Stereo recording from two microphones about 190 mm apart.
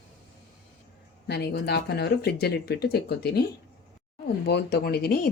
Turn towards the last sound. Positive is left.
turn(degrees=55)  # may be behind; listen again after turning